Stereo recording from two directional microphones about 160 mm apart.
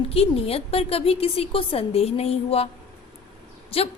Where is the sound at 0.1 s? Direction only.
40° left (ahead or behind).